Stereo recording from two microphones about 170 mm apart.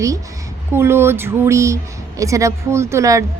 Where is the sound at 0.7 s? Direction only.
15° right (ahead or behind).